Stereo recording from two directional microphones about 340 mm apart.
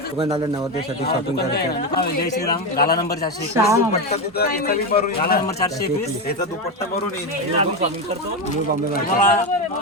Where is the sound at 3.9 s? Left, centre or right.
Left.